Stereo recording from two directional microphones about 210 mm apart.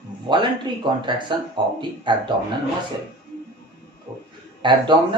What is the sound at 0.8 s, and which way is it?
Speech, 20° right (ahead or behind).